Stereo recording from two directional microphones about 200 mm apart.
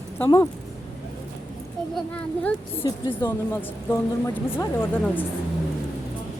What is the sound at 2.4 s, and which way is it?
Speech, 5° left (ahead or behind).